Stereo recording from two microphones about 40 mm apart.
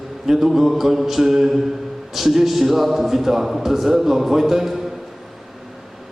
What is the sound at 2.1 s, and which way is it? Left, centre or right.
A man's voice, centre.